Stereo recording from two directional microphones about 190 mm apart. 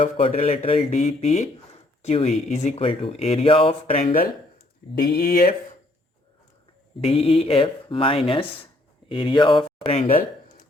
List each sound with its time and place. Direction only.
0.0 s speech: 30° left (ahead or behind)
4.9 s speech: 55° left (ahead or behind)
7.0 s speech: 30° left (ahead or behind)